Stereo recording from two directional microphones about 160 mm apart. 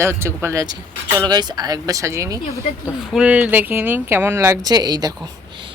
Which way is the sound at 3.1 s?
5° right (ahead or behind).